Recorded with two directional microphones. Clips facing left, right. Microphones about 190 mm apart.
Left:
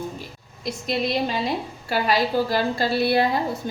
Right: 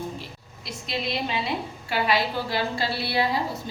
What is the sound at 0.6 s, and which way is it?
A woman's voice, 45° left (ahead or behind).